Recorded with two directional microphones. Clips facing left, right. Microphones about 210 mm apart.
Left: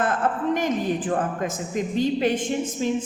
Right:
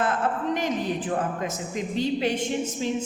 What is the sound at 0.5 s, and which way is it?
A man's voice, 50° left (ahead or behind).